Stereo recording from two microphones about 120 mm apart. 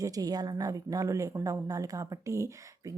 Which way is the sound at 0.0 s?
30° right (ahead or behind).